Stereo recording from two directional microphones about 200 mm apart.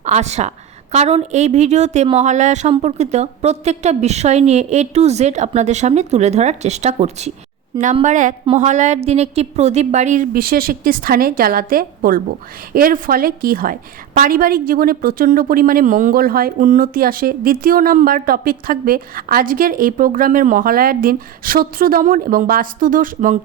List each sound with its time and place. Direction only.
0.0 s a woman's voice: 35° right (ahead or behind)